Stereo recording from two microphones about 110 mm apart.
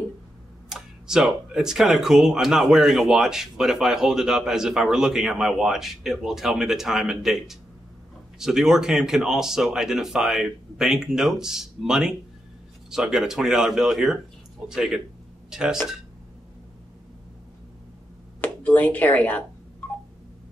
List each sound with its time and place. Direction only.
0.7 s speech: 5° right (ahead or behind)
18.4 s speech: 15° left (ahead or behind)
19.8 s telephone dialing: 15° left (ahead or behind)